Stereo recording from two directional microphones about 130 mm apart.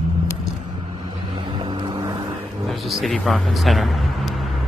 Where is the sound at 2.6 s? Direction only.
Centre (ahead or behind).